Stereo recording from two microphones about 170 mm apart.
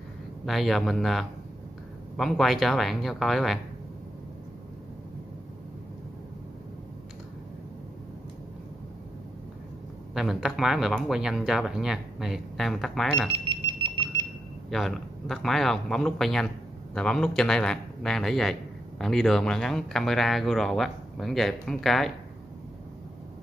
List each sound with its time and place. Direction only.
0.5 s a man's voice: centre (ahead or behind)
10.1 s a man's voice: centre (ahead or behind)
13.5 s a sound: 30° right (ahead or behind)
14.7 s a man's voice: centre (ahead or behind)